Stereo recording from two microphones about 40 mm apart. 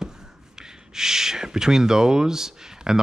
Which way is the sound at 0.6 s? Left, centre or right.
Centre.